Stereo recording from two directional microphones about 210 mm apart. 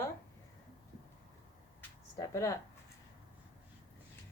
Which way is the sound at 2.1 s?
15° left (ahead or behind).